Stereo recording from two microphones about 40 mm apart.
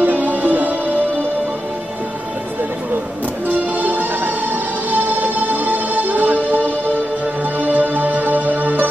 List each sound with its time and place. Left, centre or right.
0.0 s music: right
3.4 s music: right
7.6 s music: right